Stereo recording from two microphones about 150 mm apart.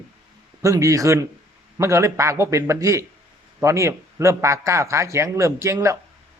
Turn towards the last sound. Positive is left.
turn(degrees=-20)  # may be behind; listen again after turning